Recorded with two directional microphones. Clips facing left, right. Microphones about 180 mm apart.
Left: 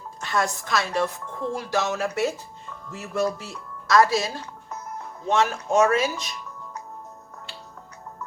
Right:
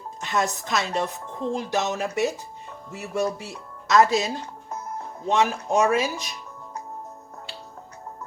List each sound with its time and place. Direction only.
0.2 s speech: 20° right (ahead or behind)
5.3 s speech: 15° right (ahead or behind)